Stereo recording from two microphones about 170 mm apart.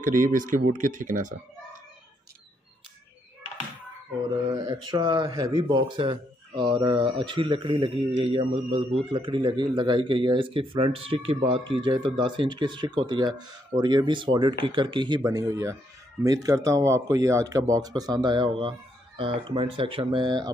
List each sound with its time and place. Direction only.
0.0 s speech: 50° right (ahead or behind)
4.6 s speech: 25° right (ahead or behind)